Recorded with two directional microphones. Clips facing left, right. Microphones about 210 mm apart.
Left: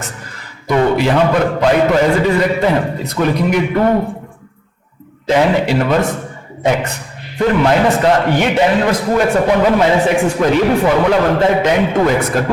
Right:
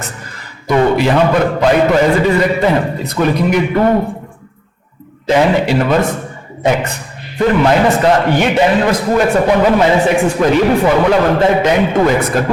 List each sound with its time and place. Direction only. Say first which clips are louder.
0.7 s a man's voice: right 1 dB; 20° right (ahead or behind)
5.3 s a man's voice: right 1 dB; 15° right (ahead or behind)